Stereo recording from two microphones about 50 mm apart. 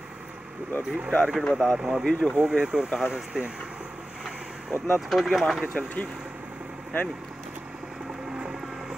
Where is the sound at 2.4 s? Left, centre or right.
Left.